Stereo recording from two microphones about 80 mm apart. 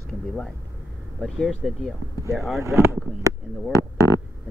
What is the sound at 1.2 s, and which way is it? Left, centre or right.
Speech, centre.